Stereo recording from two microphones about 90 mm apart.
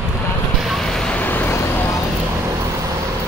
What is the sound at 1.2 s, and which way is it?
Vehicle, 20° left (ahead or behind).